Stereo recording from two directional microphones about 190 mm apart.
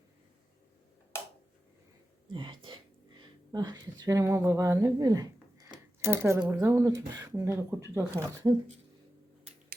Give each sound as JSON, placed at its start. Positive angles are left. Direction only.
{"t": 2.3, "sound": "speech", "side_deg": -25}